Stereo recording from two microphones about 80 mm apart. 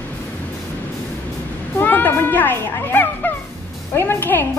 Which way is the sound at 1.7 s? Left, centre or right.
Left.